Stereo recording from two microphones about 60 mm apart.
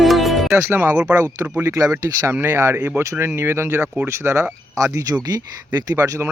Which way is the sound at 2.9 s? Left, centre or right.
Right.